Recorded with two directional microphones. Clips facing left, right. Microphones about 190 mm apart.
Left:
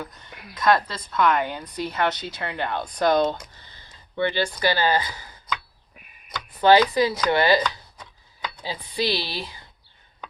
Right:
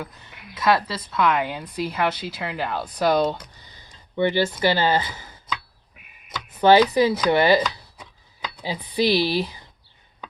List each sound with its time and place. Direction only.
0.5 s speech: 5° right (ahead or behind); by 5.2 s 20° right (ahead or behind)
6.6 s speech: 20° right (ahead or behind)
7.2 s chopping: 20° right (ahead or behind)
8.6 s speech: 15° right (ahead or behind)